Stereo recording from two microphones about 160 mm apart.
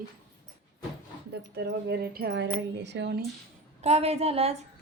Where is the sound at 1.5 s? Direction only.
90° right.